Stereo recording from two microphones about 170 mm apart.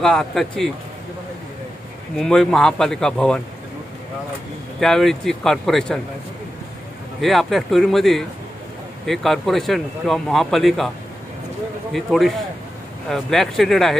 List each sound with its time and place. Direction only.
0.0 s speech: centre (ahead or behind)
2.1 s speech: 5° left (ahead or behind)
4.7 s speech: centre (ahead or behind)
7.2 s speech: centre (ahead or behind)
11.9 s speech: centre (ahead or behind)